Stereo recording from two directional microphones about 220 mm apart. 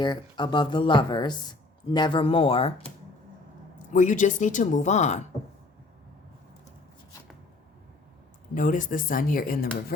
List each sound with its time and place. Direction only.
0.0 s speech: 20° left (ahead or behind)
3.9 s speech: 35° left (ahead or behind)
8.5 s speech: 35° left (ahead or behind)